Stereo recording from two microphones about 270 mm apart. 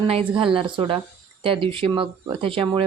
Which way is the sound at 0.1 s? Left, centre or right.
Centre.